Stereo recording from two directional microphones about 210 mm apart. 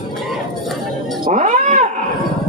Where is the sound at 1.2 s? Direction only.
35° right (ahead or behind).